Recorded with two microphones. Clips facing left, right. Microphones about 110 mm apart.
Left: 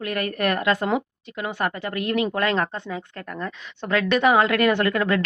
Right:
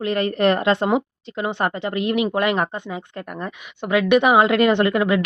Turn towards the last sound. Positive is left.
turn(degrees=-15)  # may be behind; listen again after turning